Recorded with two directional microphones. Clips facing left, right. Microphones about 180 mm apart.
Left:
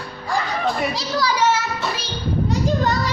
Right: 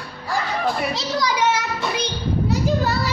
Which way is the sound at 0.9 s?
15° right (ahead or behind).